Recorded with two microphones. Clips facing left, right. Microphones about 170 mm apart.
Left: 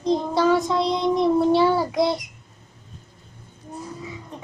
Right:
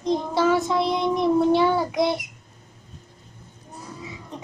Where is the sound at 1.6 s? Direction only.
5° left (ahead or behind).